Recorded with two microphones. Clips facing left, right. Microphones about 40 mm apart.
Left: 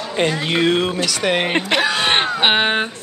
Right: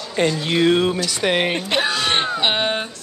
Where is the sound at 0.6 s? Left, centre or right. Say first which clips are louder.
Right 2 dB; left.